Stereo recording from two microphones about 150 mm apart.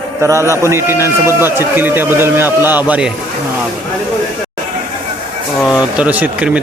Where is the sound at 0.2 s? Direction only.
20° right (ahead or behind).